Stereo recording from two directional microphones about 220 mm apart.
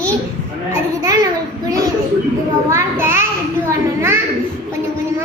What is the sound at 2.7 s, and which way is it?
Speech, 10° right (ahead or behind).